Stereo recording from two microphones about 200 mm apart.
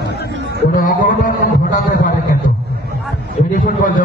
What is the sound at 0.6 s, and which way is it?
A man's voice, 45° left (ahead or behind).